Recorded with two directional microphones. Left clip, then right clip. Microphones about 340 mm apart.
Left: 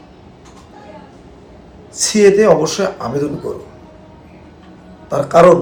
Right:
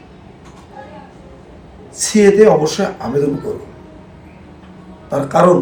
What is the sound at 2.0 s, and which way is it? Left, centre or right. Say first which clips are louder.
A man's voice: right 1 dB; centre.